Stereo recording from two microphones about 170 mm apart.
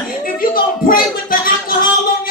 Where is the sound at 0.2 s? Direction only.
55° left (ahead or behind).